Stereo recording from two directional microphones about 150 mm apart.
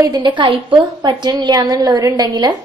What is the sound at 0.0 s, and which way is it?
A woman's voice, 30° right (ahead or behind).